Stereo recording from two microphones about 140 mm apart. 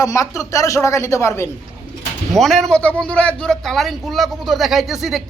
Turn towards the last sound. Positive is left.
turn(degrees=0)  # may be behind; listen again after turning